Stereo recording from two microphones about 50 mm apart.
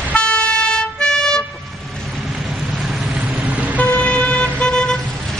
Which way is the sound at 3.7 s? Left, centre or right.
Left.